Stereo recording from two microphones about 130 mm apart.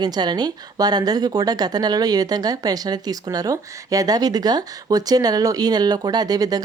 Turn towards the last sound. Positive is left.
turn(degrees=-30)  # may be behind; listen again after turning